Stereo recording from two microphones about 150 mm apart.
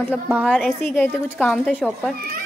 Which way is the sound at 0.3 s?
10° right (ahead or behind).